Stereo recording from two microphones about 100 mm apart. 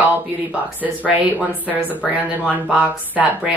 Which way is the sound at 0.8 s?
15° right (ahead or behind).